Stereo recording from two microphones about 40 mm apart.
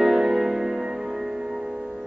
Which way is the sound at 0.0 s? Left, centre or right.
Centre.